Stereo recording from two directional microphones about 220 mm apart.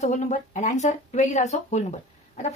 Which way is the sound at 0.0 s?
30° left (ahead or behind).